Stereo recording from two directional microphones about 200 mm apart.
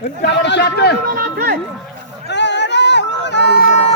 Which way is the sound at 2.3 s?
60° left (ahead or behind).